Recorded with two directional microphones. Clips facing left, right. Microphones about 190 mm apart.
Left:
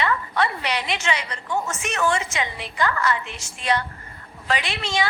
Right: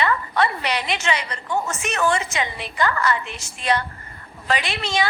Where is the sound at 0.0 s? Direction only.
40° right (ahead or behind).